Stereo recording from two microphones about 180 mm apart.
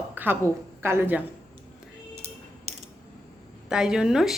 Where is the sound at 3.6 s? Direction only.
5° right (ahead or behind).